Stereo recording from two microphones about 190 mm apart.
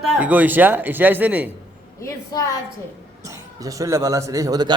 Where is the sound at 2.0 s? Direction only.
20° left (ahead or behind).